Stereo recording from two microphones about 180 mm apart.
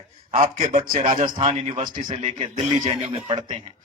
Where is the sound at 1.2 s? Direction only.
30° right (ahead or behind).